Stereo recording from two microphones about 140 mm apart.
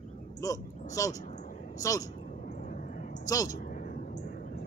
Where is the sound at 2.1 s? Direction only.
65° left (ahead or behind).